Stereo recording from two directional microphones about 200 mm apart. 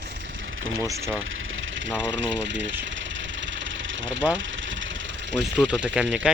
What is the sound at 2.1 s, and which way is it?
Speech, 65° right (ahead or behind).